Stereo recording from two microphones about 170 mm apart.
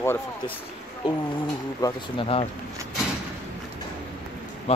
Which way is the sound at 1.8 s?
25° left (ahead or behind).